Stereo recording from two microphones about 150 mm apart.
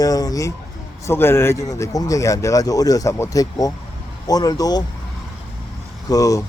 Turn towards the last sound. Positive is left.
turn(degrees=20)  # may be behind; listen again after turning